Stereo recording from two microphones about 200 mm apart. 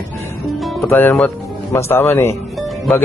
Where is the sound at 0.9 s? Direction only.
10° left (ahead or behind).